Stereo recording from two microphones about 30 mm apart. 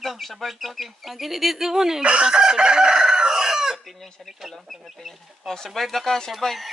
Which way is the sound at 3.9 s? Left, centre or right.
Centre.